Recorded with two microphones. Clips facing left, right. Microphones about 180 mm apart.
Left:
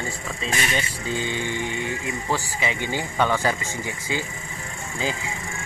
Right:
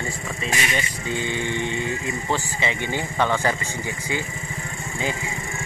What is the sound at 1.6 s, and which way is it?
Speech, 25° right (ahead or behind).